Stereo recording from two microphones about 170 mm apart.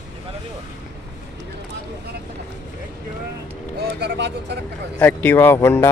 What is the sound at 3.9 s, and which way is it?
Vehicle, 75° right (ahead or behind).